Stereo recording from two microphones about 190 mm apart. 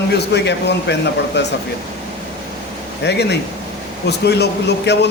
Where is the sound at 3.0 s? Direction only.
65° left (ahead or behind).